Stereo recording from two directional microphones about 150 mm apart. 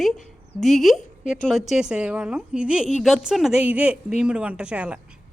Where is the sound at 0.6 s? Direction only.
Centre (ahead or behind).